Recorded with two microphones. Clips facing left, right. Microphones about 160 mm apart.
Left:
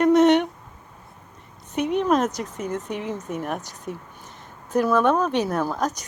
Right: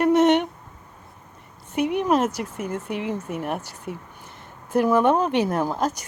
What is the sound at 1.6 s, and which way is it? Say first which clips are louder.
A woman's voice: even; 10° right (ahead or behind).